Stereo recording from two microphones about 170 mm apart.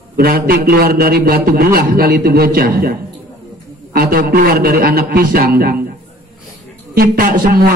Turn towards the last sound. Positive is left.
turn(degrees=-60)  # may be behind; listen again after turning